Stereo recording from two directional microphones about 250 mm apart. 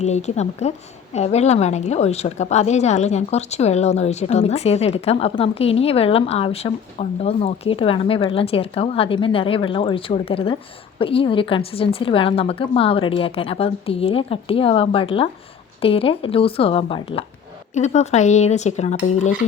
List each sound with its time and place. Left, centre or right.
0.0 s a woman's voice: left